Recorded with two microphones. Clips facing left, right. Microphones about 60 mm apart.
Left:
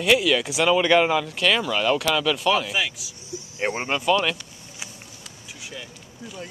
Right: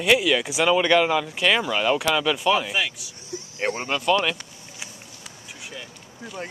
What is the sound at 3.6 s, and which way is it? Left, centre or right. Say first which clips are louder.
Speech: left 1 dB; left.